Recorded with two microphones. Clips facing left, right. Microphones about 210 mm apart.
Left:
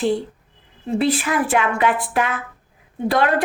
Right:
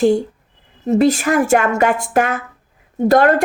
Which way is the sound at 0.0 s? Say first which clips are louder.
Right 6 dB; 45° right (ahead or behind).